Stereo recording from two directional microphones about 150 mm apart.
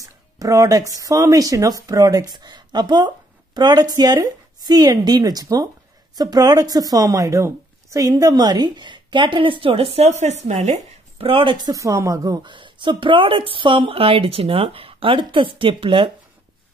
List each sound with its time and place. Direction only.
0.0 s a woman's voice: 25° right (ahead or behind)